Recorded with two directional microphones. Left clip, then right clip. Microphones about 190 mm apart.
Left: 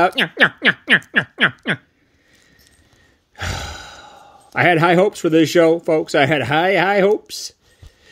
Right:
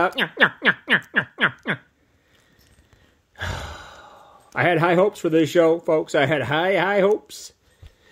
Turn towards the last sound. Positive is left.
turn(degrees=45)  # may be behind; listen again after turning